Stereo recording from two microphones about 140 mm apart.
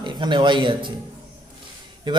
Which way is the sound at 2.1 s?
35° right (ahead or behind).